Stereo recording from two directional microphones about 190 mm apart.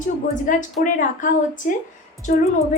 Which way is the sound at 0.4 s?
45° left (ahead or behind).